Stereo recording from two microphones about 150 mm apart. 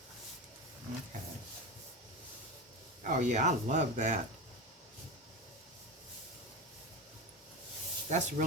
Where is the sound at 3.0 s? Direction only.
55° right (ahead or behind).